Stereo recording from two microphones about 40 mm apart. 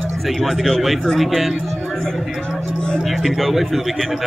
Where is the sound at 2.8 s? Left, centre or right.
Left.